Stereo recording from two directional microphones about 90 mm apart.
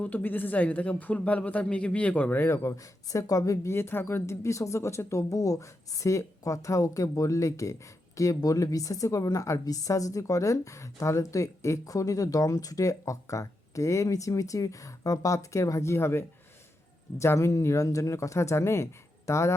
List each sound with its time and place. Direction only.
0.0 s a man's voice: 20° left (ahead or behind)